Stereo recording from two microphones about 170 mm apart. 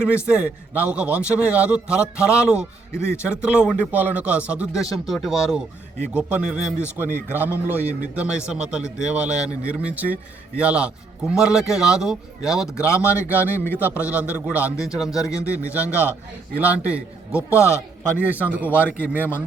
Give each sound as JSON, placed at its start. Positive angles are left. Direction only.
{"t": 0.3, "sound": "a man's voice", "side_deg": -10}
{"t": 2.9, "sound": "a man's voice", "side_deg": 15}
{"t": 3.2, "sound": "a man's voice", "side_deg": -5}
{"t": 12.6, "sound": "a man's voice", "side_deg": 15}
{"t": 13.7, "sound": "a man's voice", "side_deg": -10}
{"t": 17.5, "sound": "a man's voice", "side_deg": 15}
{"t": 18.2, "sound": "a man's voice", "side_deg": -10}